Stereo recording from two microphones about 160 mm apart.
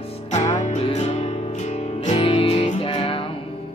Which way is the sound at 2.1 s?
35° left (ahead or behind).